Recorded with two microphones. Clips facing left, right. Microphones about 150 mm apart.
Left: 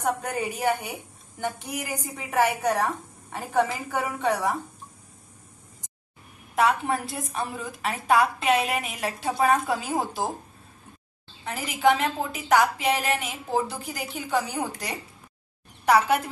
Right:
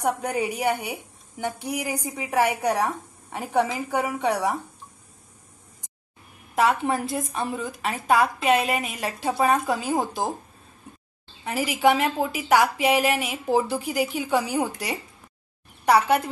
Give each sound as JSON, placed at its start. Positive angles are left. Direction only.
{"t": 0.0, "sound": "a woman's voice", "side_deg": -10}
{"t": 6.5, "sound": "a woman's voice", "side_deg": 0}
{"t": 11.4, "sound": "a woman's voice", "side_deg": -10}